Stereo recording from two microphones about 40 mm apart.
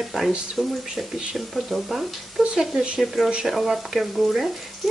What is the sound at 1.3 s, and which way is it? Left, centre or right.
Speech, centre.